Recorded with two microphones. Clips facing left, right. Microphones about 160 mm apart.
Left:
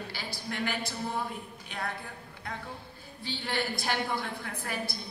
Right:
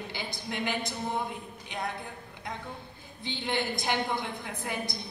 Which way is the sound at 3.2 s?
20° right (ahead or behind).